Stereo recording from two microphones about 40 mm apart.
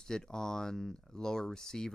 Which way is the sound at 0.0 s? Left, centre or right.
Centre.